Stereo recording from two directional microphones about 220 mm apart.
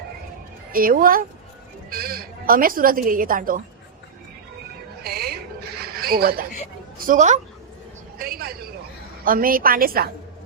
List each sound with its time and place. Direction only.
0.7 s speech: 40° right (ahead or behind)
5.0 s a sound: 45° right (ahead or behind)
7.0 s a woman's voice: 35° right (ahead or behind)